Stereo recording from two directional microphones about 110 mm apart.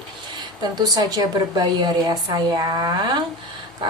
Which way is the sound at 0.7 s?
40° right (ahead or behind).